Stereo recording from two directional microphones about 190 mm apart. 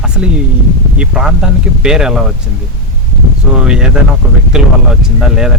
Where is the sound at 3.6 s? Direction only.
5° right (ahead or behind).